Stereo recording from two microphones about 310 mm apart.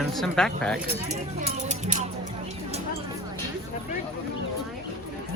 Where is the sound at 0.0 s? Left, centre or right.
Centre.